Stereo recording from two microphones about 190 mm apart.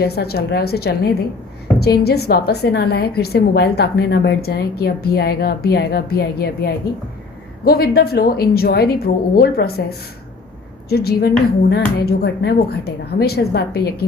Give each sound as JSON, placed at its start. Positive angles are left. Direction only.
{"t": 0.0, "sound": "a woman's voice", "side_deg": 55}
{"t": 10.8, "sound": "a woman's voice", "side_deg": 55}